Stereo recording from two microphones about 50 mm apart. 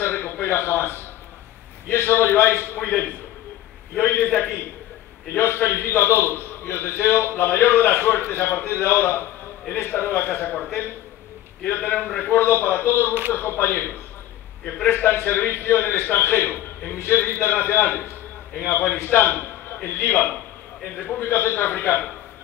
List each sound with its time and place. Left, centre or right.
0.0 s a sound: left
1.9 s a man's voice: left
5.3 s a man's voice: left
11.6 s a man's voice: left
15.0 s a man's voice: left
19.0 s a man's voice: left
20.8 s a man's voice: left
21.2 s a man's voice: left